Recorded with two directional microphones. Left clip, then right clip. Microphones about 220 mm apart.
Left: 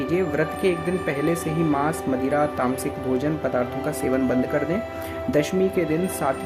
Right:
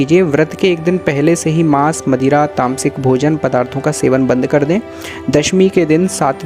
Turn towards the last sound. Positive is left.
turn(degrees=-40)  # may be behind; listen again after turning